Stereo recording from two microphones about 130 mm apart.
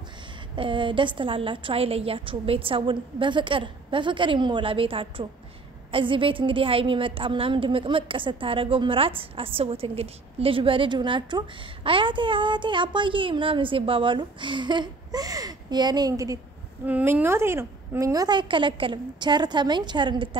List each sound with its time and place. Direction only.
0.6 s a woman's voice: 40° right (ahead or behind)
16.8 s a woman's voice: 15° right (ahead or behind); by 20.2 s 35° right (ahead or behind)